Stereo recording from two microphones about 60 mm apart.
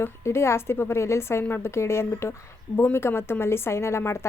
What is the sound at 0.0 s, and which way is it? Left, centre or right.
A woman's voice, left.